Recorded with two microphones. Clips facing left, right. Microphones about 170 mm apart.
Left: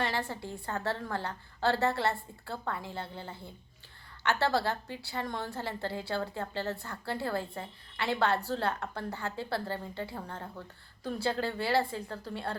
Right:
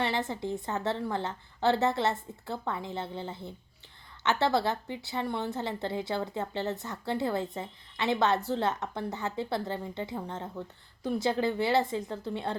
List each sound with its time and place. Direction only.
0.0 s a woman's voice: 20° right (ahead or behind)